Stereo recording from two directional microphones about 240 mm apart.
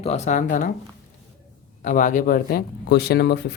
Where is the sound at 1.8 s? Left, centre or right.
Left.